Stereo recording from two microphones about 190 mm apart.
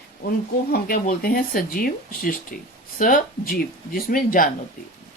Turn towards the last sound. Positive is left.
turn(degrees=45)  # may be behind; listen again after turning